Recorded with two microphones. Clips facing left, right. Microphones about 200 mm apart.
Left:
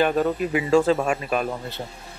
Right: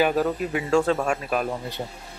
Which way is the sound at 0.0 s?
Centre (ahead or behind).